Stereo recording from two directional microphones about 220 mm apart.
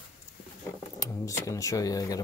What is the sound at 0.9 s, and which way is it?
Speech, 15° left (ahead or behind).